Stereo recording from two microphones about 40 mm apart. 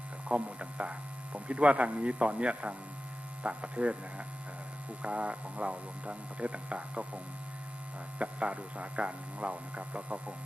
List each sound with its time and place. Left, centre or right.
0.3 s speech: right
8.2 s speech: right